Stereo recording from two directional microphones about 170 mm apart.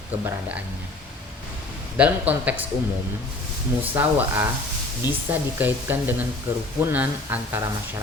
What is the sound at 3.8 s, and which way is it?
Speech, 10° right (ahead or behind).